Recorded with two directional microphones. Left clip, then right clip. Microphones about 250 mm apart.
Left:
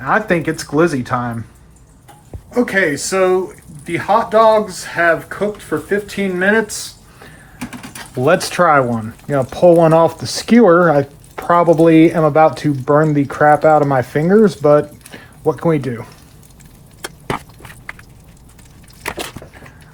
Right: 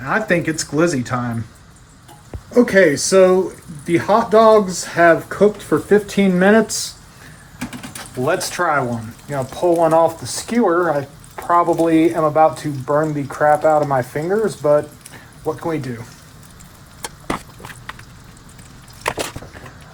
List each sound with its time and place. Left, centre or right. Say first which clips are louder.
0.0 s speech: left 3 dB; centre
2.5 s speech: right 3 dB; centre
7.6 s a sound: even; centre
8.2 s speech: left 6 dB; left
14.6 s a sound: left 4 dB; left
15.6 s speech: left 7 dB; left